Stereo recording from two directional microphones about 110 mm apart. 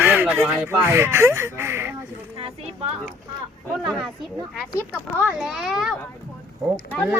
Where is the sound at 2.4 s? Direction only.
55° right (ahead or behind).